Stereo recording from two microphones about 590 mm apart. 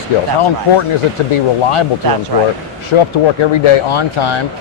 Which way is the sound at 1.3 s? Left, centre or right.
Left.